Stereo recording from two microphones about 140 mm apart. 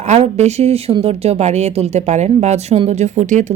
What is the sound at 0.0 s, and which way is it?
Speech, 50° right (ahead or behind).